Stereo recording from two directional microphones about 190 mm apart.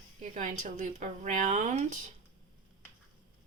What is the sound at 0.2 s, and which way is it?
Speech, 40° right (ahead or behind).